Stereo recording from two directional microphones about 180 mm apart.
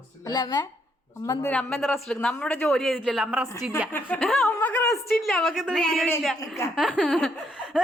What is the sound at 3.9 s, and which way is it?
A man's voice, 5° left (ahead or behind).